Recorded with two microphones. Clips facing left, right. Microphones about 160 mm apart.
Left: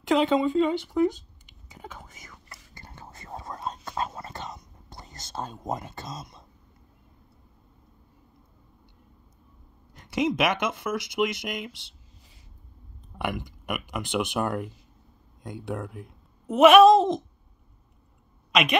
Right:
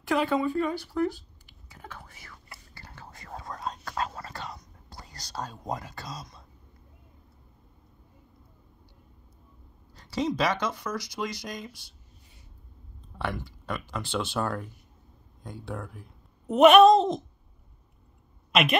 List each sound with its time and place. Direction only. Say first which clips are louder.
0.0 s speech: left 4 dB; 20° left (ahead or behind)
2.7 s whispering: left 2 dB; 20° left (ahead or behind)
9.9 s speech: left 3 dB; 20° left (ahead or behind)
13.2 s speech: left 2 dB; 15° left (ahead or behind)
16.4 s speech: left 1 dB; 5° left (ahead or behind)
18.5 s a woman's voice: even; centre (ahead or behind)